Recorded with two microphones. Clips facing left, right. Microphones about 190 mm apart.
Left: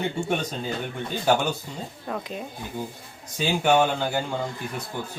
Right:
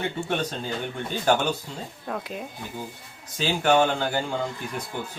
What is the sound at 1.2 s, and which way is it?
Speech, 10° left (ahead or behind).